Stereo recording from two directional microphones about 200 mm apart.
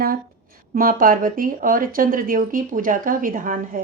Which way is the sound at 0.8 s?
45° right (ahead or behind).